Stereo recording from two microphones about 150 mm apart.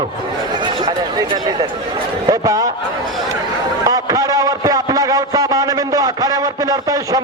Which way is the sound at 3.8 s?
25° right (ahead or behind).